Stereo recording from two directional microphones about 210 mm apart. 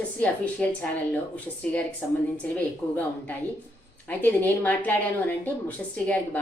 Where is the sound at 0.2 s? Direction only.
10° left (ahead or behind).